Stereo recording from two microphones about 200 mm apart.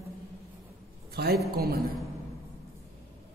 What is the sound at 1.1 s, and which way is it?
Speech, 55° right (ahead or behind).